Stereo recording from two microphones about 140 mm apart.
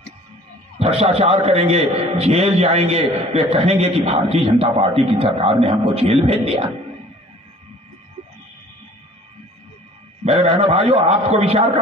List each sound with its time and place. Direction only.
0.7 s a man's voice: 45° right (ahead or behind)
10.2 s a man's voice: 50° right (ahead or behind)